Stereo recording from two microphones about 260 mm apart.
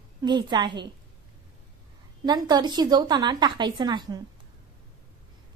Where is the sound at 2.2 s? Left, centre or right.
Centre.